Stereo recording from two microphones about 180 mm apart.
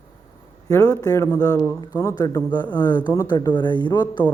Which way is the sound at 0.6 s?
20° left (ahead or behind).